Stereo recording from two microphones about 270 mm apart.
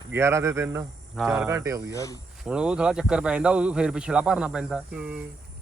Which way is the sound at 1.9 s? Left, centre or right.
Centre.